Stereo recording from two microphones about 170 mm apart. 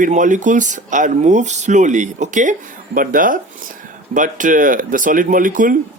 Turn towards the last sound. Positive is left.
turn(degrees=-50)  # may be behind; listen again after turning